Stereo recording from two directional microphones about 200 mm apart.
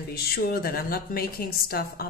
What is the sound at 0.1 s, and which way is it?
A woman's voice, 50° left (ahead or behind).